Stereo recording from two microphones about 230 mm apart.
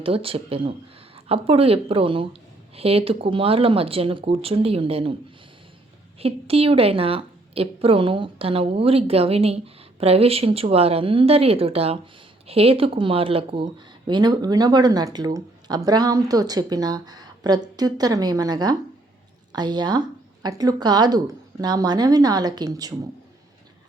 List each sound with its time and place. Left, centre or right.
0.0 s a woman's voice: right
6.1 s a woman's voice: right